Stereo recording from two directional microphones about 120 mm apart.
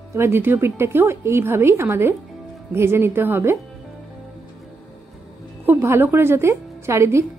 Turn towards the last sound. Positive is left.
turn(degrees=-25)  # may be behind; listen again after turning